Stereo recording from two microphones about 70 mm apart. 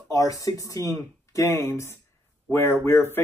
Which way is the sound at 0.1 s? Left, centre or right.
Left.